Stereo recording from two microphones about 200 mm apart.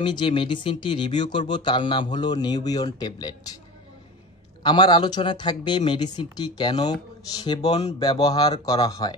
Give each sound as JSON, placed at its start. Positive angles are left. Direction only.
{"t": 0.0, "sound": "speech", "side_deg": 25}
{"t": 4.6, "sound": "speech", "side_deg": 20}